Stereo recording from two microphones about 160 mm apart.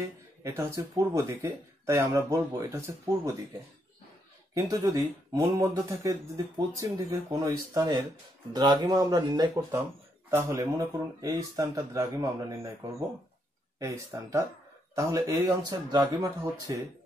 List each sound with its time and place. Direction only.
0.4 s speech: 20° right (ahead or behind)
4.6 s speech: 20° right (ahead or behind)
13.7 s speech: 20° right (ahead or behind)